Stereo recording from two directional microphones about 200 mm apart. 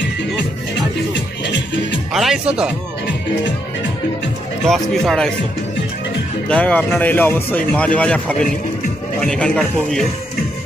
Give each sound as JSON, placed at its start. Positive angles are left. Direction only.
{"t": 1.1, "sound": "music", "side_deg": 65}
{"t": 2.1, "sound": "speech", "side_deg": -5}
{"t": 4.6, "sound": "speech", "side_deg": 0}
{"t": 6.5, "sound": "speech", "side_deg": 5}